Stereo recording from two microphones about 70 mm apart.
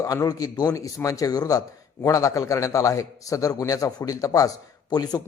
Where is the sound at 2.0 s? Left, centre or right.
Left.